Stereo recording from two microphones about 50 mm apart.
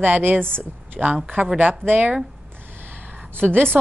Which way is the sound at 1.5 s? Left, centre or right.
Right.